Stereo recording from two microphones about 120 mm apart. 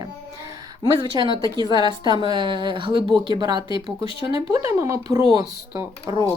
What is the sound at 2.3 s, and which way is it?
Speech, 40° right (ahead or behind).